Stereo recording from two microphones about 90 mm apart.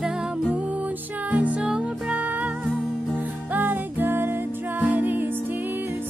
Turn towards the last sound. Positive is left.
turn(degrees=-20)  # may be behind; listen again after turning